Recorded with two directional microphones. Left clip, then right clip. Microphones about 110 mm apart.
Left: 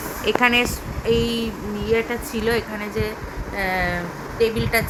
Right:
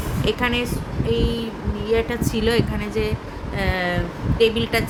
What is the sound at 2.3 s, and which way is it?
Speech, 15° right (ahead or behind).